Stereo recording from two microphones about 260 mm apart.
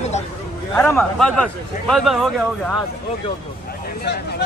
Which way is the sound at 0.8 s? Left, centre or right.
Centre.